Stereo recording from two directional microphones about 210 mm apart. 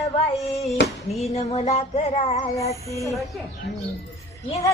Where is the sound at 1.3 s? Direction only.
30° left (ahead or behind).